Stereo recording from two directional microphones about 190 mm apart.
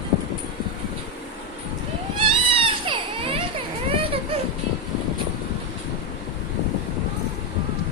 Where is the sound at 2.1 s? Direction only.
30° right (ahead or behind).